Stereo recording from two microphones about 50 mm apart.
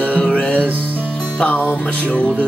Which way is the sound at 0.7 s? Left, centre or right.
Right.